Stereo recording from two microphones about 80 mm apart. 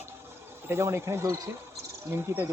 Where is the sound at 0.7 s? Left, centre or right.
Right.